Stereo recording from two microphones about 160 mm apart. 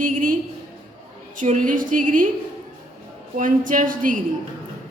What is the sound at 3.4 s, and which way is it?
Speech, 55° right (ahead or behind).